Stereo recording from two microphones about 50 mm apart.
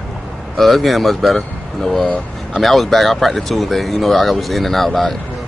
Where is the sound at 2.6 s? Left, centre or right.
Centre.